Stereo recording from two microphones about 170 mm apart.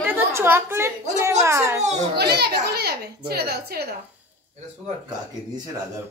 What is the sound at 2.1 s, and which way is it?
A child's voice, 75° right (ahead or behind).